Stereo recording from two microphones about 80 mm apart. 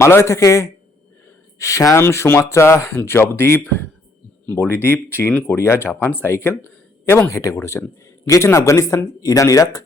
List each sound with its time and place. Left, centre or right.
0.0 s speech: left; by 5.5 s centre
5.5 s speech: left